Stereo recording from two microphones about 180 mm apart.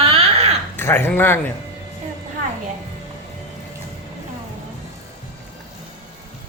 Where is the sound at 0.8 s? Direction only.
10° left (ahead or behind).